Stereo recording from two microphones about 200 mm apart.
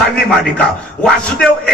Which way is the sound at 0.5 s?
5° left (ahead or behind).